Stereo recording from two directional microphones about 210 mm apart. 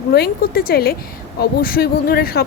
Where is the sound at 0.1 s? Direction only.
45° left (ahead or behind).